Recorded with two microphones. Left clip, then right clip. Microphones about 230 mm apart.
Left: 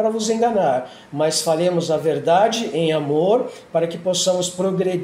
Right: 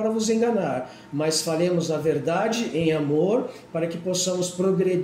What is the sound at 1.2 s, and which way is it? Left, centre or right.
Speech, left.